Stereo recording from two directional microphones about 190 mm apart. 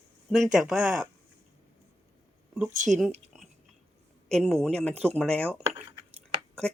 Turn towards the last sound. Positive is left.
turn(degrees=5)  # may be behind; listen again after turning